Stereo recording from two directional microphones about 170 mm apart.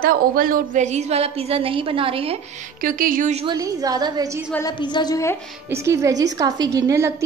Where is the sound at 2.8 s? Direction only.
55° right (ahead or behind).